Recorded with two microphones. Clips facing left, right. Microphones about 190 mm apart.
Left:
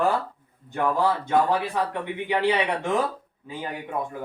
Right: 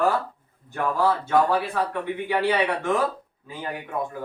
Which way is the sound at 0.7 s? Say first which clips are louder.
Even; 20° left (ahead or behind).